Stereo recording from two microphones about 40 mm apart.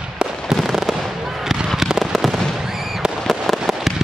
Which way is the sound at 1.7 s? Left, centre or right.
Centre.